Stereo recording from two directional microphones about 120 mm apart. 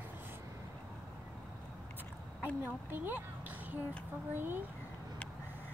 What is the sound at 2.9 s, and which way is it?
Speech, 15° right (ahead or behind).